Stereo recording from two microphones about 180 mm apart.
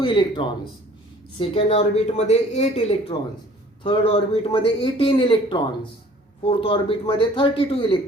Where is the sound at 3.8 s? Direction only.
30° left (ahead or behind).